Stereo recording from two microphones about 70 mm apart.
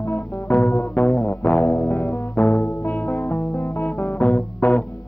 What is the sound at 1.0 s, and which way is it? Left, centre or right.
Music, left.